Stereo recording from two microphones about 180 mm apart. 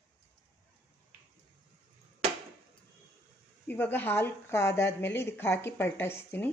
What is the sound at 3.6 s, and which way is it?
Speech, 10° left (ahead or behind).